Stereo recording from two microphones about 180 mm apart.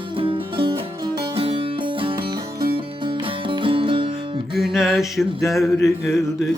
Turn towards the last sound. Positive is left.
turn(degrees=0)  # may be behind; listen again after turning